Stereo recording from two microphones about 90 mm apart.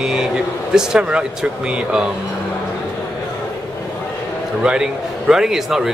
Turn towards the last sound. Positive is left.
turn(degrees=-5)  # may be behind; listen again after turning